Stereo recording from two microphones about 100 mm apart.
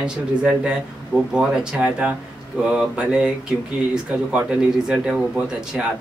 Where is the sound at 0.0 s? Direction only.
10° right (ahead or behind).